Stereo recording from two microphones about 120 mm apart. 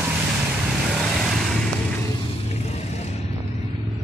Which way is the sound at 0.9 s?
Centre (ahead or behind).